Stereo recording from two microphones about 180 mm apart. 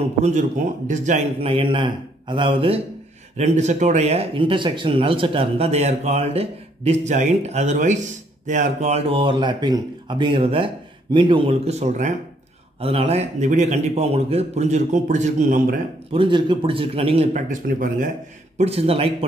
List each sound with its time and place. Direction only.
0.2 s speech: 45° right (ahead or behind)
3.3 s speech: 40° right (ahead or behind)
16.1 s a man's voice: 25° right (ahead or behind)
17.5 s speech: 50° right (ahead or behind)
18.6 s speech: 35° right (ahead or behind)